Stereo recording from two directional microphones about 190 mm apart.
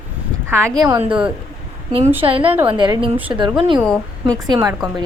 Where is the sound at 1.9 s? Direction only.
30° right (ahead or behind).